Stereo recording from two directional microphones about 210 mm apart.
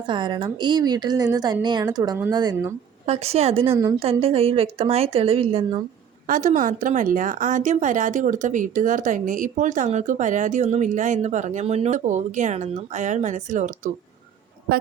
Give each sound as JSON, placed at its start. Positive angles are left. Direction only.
{"t": 0.1, "sound": "a woman's voice", "side_deg": -20}
{"t": 3.1, "sound": "a woman's voice", "side_deg": -30}
{"t": 3.7, "sound": "a woman's voice", "side_deg": -15}
{"t": 4.0, "sound": "a woman's voice", "side_deg": -30}
{"t": 6.2, "sound": "a woman's voice", "side_deg": -40}